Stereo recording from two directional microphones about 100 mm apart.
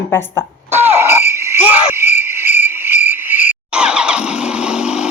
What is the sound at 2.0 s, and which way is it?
Cricket, 25° right (ahead or behind).